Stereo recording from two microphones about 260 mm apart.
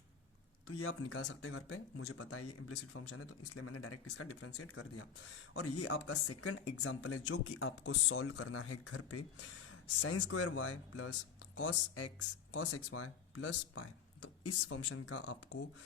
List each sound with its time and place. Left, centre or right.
0.7 s speech: left